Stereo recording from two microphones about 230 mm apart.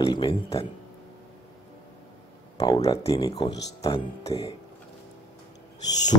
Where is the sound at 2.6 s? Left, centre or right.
Centre.